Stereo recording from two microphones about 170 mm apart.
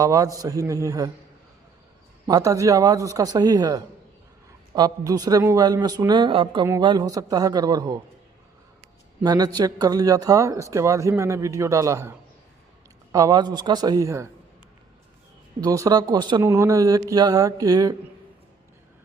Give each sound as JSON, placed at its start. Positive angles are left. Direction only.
{"t": 0.0, "sound": "a man's voice", "side_deg": -20}
{"t": 2.2, "sound": "a man's voice", "side_deg": -20}
{"t": 9.2, "sound": "a man's voice", "side_deg": -25}
{"t": 15.6, "sound": "a man's voice", "side_deg": -20}